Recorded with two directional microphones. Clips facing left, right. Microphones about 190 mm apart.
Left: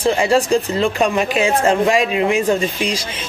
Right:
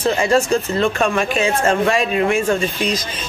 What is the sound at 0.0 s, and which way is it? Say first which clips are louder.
Speech: left 1 dB; 15° left (ahead or behind).